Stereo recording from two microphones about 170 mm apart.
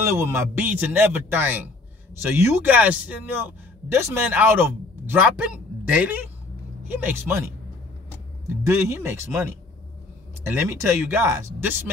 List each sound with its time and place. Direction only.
0.0 s a man's voice: 15° right (ahead or behind)